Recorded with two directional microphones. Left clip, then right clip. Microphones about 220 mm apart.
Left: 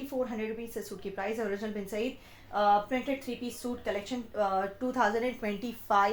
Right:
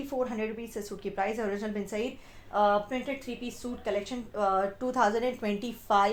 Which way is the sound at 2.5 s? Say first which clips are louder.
Even; 35° right (ahead or behind).